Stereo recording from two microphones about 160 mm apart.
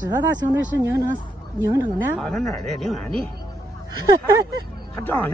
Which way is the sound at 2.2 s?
Centre (ahead or behind).